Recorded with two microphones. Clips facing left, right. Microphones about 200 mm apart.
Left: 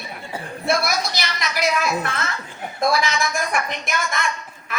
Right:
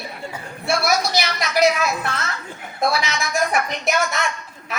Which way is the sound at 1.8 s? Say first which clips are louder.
Even; 50° left (ahead or behind).